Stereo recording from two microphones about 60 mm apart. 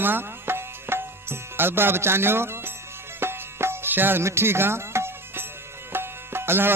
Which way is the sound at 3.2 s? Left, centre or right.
Right.